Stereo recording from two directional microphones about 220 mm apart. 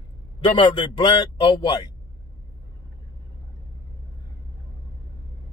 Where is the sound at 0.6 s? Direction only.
20° left (ahead or behind).